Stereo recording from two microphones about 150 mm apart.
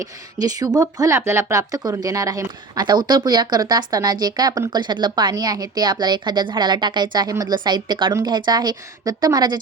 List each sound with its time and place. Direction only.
0.3 s speech: 25° right (ahead or behind)